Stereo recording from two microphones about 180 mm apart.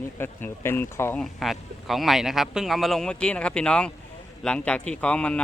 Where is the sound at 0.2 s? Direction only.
15° left (ahead or behind).